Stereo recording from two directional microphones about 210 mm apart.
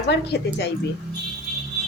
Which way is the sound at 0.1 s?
50° left (ahead or behind).